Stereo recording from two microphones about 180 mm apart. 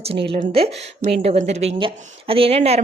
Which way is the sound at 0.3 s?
35° right (ahead or behind).